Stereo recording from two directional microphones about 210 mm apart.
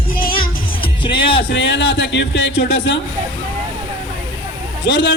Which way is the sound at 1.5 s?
60° left (ahead or behind).